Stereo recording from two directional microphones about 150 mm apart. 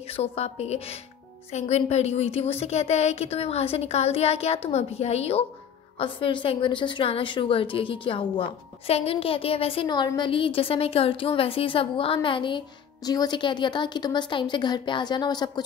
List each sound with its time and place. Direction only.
0.1 s a woman's voice: 45° left (ahead or behind)